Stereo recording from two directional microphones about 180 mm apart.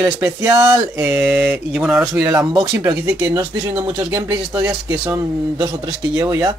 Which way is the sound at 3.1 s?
20° right (ahead or behind).